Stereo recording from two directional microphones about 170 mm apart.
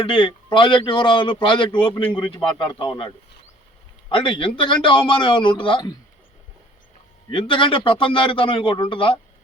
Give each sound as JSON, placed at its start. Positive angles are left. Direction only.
{"t": 0.0, "sound": "a man's voice", "side_deg": 30}
{"t": 4.1, "sound": "a man's voice", "side_deg": 30}
{"t": 7.3, "sound": "a man's voice", "side_deg": 30}